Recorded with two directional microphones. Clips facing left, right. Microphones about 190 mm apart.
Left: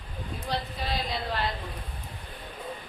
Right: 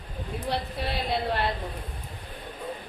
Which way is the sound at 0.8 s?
60° right (ahead or behind).